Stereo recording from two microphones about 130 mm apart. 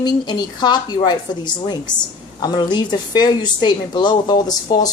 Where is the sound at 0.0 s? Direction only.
35° left (ahead or behind).